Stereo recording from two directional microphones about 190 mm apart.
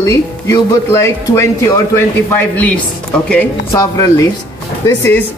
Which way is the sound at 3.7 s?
20° left (ahead or behind).